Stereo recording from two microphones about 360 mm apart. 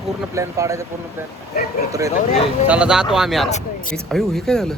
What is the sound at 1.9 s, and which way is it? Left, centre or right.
Speech, centre.